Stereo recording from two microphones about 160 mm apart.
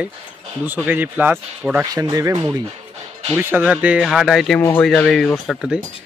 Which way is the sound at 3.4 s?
10° right (ahead or behind).